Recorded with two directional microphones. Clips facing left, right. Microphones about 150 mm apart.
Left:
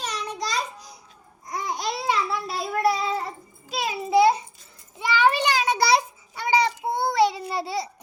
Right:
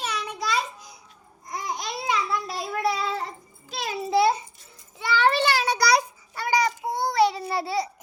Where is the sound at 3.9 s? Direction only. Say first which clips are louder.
Left 2 dB; 10° left (ahead or behind).